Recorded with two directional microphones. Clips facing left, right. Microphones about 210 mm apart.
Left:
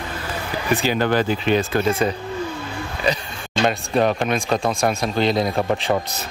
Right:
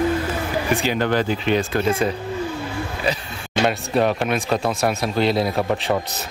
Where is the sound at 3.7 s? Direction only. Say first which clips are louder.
Left 1 dB; 5° right (ahead or behind).